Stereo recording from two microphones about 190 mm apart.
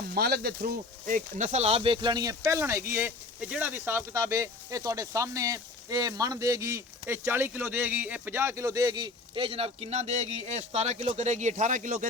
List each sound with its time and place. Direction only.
0.1 s speech: 55° right (ahead or behind)